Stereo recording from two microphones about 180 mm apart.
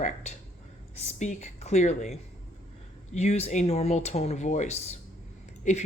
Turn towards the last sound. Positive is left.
turn(degrees=40)  # may be behind; listen again after turning